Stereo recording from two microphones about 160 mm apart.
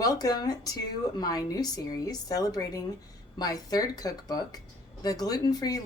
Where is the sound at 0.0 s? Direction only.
25° left (ahead or behind).